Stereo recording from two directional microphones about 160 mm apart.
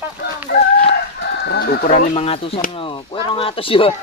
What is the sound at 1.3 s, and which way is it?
Chicken, 85° left.